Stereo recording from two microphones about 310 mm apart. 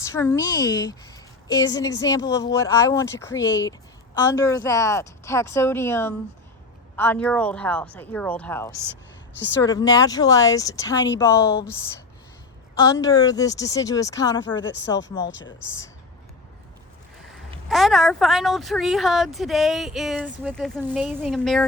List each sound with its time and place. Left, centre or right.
0.0 s a woman's voice: centre
12.8 s speech: centre
15.3 s speech: left
17.7 s speech: centre